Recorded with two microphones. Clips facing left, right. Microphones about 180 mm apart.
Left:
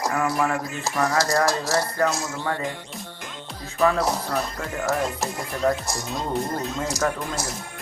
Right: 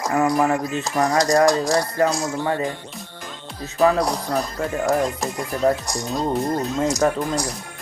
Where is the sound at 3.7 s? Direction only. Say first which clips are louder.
Right 4 dB; 35° right (ahead or behind).